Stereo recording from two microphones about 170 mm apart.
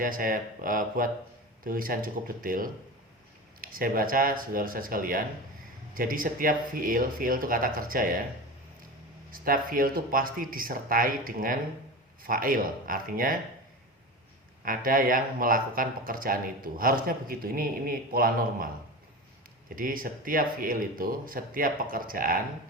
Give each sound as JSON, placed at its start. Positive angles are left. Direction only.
{"t": 0.0, "sound": "speech", "side_deg": -55}
{"t": 9.3, "sound": "speech", "side_deg": -55}
{"t": 14.6, "sound": "speech", "side_deg": -55}
{"t": 19.7, "sound": "speech", "side_deg": -55}